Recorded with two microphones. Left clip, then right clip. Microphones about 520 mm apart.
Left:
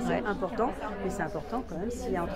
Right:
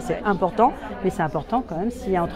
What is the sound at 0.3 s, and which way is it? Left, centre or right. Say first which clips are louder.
Speech: right 11 dB; right.